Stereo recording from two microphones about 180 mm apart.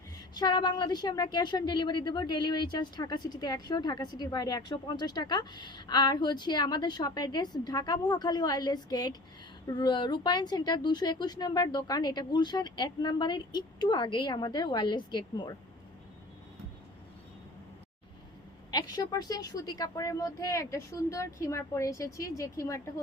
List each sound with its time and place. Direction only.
0.3 s a woman's voice: 25° left (ahead or behind)
18.7 s a woman's voice: 20° left (ahead or behind)